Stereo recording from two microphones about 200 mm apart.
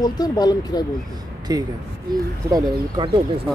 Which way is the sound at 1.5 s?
20° right (ahead or behind).